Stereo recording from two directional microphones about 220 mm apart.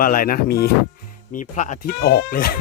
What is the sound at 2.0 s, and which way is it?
Speech, 45° left (ahead or behind).